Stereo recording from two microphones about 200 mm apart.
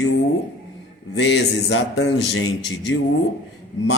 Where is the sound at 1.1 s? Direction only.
65° left (ahead or behind).